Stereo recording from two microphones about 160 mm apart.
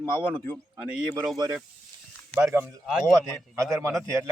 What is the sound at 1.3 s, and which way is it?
Speech, 25° right (ahead or behind).